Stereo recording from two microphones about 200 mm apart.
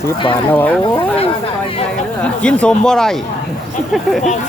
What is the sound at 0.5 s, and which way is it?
Speech, 10° left (ahead or behind).